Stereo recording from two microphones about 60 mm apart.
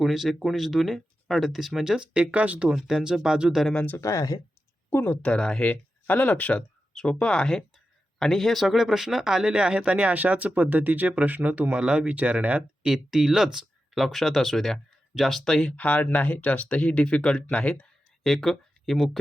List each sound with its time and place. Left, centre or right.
0.0 s speech: centre
4.0 s speech: left
4.9 s speech: left
5.2 s speech: centre
5.6 s speech: left
6.6 s speech: centre; by 12.9 s right
12.9 s speech: centre
15.7 s speech: left
18.2 s speech: centre